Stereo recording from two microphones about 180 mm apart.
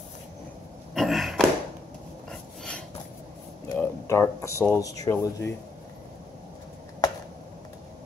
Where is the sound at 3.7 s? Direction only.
15° left (ahead or behind).